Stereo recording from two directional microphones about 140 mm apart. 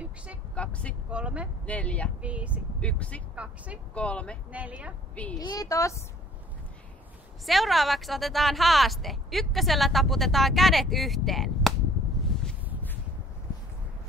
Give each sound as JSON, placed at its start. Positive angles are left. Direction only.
{"t": 0.6, "sound": "speech", "side_deg": 10}
{"t": 1.1, "sound": "a woman's voice", "side_deg": -10}
{"t": 1.7, "sound": "speech", "side_deg": 10}
{"t": 2.2, "sound": "a woman's voice", "side_deg": -10}
{"t": 2.8, "sound": "speech", "side_deg": 10}
{"t": 3.3, "sound": "a woman's voice", "side_deg": -10}
{"t": 3.9, "sound": "speech", "side_deg": 10}
{"t": 4.5, "sound": "a woman's voice", "side_deg": -10}
{"t": 5.4, "sound": "a woman's voice", "side_deg": 25}
{"t": 7.4, "sound": "a woman's voice", "side_deg": 0}
{"t": 12.4, "sound": "a sound", "side_deg": 5}